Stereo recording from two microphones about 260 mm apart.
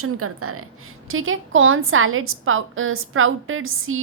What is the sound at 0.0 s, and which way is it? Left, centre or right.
A woman's voice, right.